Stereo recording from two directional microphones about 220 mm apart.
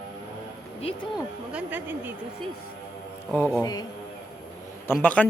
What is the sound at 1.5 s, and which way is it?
Speech, 10° right (ahead or behind).